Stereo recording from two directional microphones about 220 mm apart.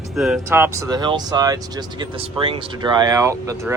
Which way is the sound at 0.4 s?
10° right (ahead or behind).